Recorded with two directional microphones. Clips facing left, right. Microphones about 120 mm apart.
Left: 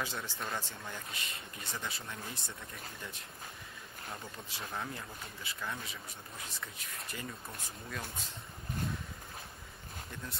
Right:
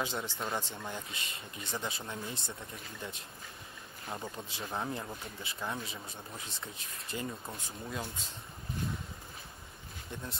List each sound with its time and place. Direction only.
0.0 s speech: 20° right (ahead or behind)
4.1 s speech: 25° right (ahead or behind)